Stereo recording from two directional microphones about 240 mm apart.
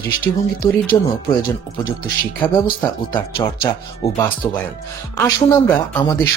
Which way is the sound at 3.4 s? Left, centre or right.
Centre.